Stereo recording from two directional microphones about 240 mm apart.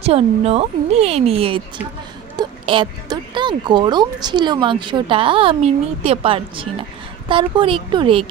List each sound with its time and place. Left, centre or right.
0.0 s speech: right